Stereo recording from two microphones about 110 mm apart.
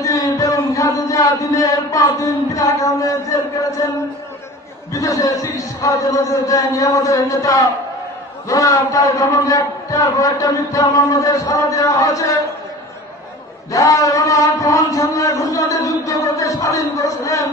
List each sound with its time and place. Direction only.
0.0 s a sound: 30° left (ahead or behind)
4.9 s a man's voice: 30° left (ahead or behind)
13.7 s a man's voice: 30° left (ahead or behind)